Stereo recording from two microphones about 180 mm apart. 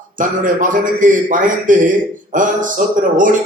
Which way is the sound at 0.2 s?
45° right (ahead or behind).